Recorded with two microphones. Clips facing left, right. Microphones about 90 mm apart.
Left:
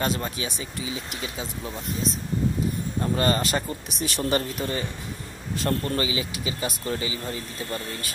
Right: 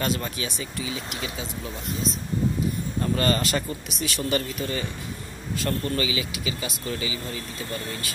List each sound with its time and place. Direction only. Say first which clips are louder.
0.0 s speech: even; 25° left (ahead or behind)
3.0 s speech: even; 20° left (ahead or behind)
4.0 s speech: left 1 dB; 35° left (ahead or behind)